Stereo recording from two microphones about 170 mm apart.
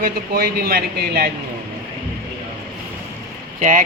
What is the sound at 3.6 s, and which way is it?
Speech, 45° right (ahead or behind).